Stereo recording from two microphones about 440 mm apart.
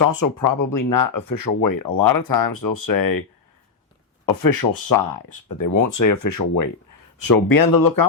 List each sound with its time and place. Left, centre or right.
0.0 s speech: left
4.3 s speech: left